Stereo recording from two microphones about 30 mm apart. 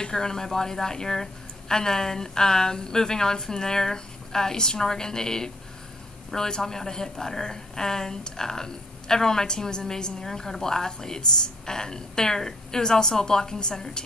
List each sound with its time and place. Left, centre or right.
0.0 s a woman's voice: left